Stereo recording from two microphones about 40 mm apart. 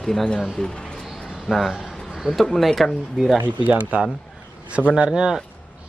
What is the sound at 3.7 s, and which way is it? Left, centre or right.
Speech, right.